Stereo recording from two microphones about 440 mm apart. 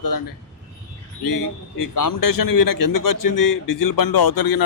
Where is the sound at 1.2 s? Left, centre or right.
Left.